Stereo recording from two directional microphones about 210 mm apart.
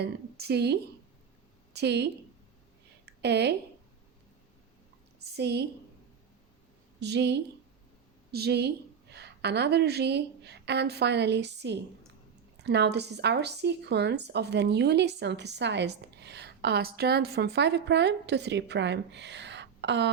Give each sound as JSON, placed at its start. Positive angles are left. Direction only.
{"t": 0.0, "sound": "speech", "side_deg": -50}
{"t": 3.1, "sound": "speech", "side_deg": -55}
{"t": 5.4, "sound": "speech", "side_deg": -50}
{"t": 7.0, "sound": "a woman's voice", "side_deg": -55}